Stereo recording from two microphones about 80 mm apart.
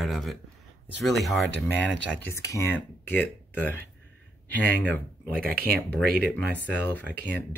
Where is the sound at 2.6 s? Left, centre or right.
Left.